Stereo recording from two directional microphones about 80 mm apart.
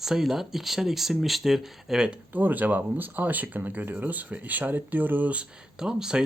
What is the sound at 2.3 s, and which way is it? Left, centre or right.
Speech, right.